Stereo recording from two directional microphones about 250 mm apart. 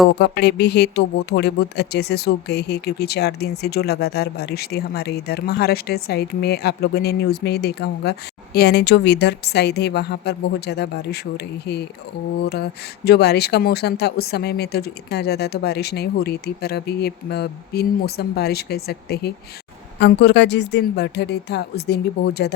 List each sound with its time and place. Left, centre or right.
0.2 s speech: left
13.1 s speech: left